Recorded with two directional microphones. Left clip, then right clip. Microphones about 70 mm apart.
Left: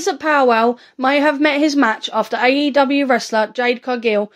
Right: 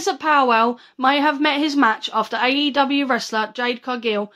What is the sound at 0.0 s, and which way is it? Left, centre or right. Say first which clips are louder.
A woman's voice: left 2 dB; left.